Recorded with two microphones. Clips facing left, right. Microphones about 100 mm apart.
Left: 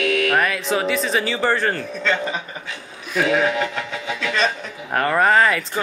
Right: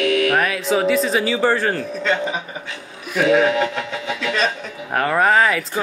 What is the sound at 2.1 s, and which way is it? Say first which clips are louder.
Speech: right 2 dB; 10° right (ahead or behind).